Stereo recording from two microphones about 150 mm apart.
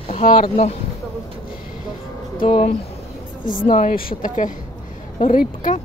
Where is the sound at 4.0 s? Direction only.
70° left (ahead or behind).